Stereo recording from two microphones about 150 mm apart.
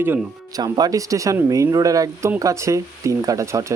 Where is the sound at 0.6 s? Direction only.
25° right (ahead or behind).